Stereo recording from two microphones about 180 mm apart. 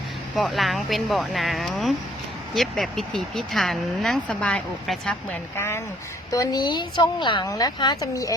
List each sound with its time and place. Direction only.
0.3 s speech: centre (ahead or behind); by 8.4 s 20° left (ahead or behind)